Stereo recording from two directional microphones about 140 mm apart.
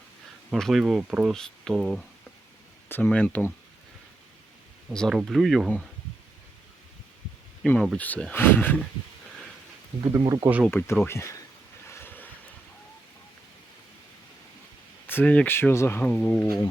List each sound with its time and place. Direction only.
0.5 s speech: centre (ahead or behind)
2.9 s speech: 10° left (ahead or behind)
4.9 s speech: centre (ahead or behind)
7.6 s speech: 5° left (ahead or behind)
10.0 s speech: 30° right (ahead or behind)
10.7 s speech: 15° left (ahead or behind)
11.9 s vehicle: 15° left (ahead or behind)
15.0 s speech: 15° left (ahead or behind)